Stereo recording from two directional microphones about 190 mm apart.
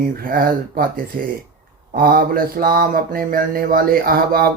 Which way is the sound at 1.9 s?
50° right (ahead or behind).